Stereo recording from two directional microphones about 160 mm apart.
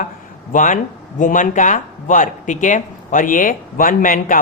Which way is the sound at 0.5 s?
55° left (ahead or behind).